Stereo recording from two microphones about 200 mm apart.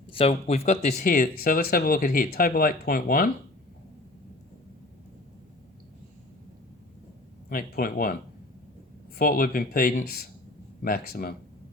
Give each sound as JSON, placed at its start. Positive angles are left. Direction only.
{"t": 0.1, "sound": "speech", "side_deg": 30}
{"t": 7.5, "sound": "speech", "side_deg": 45}
{"t": 9.1, "sound": "speech", "side_deg": 45}